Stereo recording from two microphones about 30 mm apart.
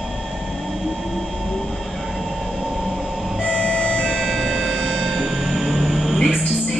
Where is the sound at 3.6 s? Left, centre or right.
Left.